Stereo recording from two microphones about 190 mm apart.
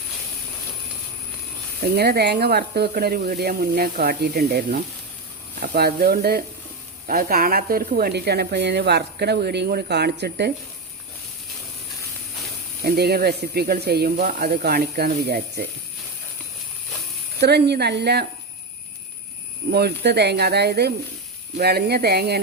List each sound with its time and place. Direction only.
1.8 s speech: 55° right (ahead or behind)
12.8 s speech: 55° right (ahead or behind)
17.4 s speech: 60° right (ahead or behind)
19.7 s speech: 60° right (ahead or behind)